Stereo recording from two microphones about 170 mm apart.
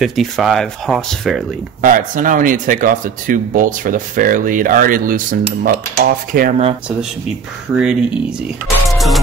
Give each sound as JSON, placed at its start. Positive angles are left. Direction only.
{"t": 0.0, "sound": "speech", "side_deg": 0}
{"t": 1.8, "sound": "speech", "side_deg": -50}
{"t": 5.6, "sound": "cutlery", "side_deg": -60}
{"t": 7.7, "sound": "speech", "side_deg": -5}
{"t": 8.9, "sound": "music", "side_deg": 0}